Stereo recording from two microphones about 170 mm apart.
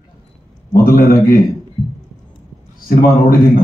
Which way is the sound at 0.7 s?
60° left (ahead or behind).